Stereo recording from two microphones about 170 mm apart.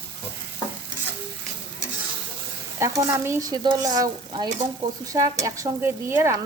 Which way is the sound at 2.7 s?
15° right (ahead or behind).